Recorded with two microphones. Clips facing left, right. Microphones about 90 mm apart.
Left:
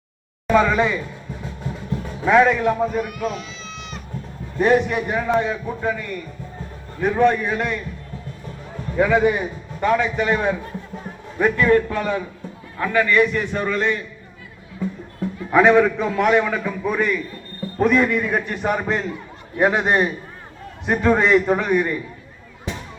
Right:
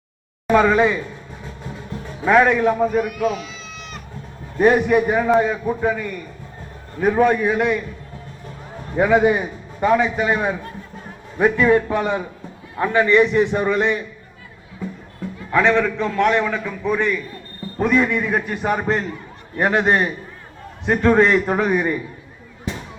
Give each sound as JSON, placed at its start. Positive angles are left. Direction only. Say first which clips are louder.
{"t": 0.4, "sound": "a man's voice", "louder": "right 2 dB", "side_deg": -5}
{"t": 2.2, "sound": "a man's voice", "louder": "right 1 dB", "side_deg": -5}
{"t": 7.2, "sound": "a man's voice", "louder": "right 1 dB", "side_deg": -5}
{"t": 9.0, "sound": "a man's voice", "louder": "right 2 dB", "side_deg": -15}
{"t": 9.4, "sound": "a man's voice", "louder": "right 2 dB", "side_deg": -10}
{"t": 15.5, "sound": "a man's voice", "louder": "left 3 dB", "side_deg": 10}